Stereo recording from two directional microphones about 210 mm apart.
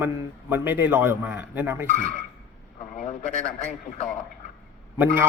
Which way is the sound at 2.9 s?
35° left (ahead or behind).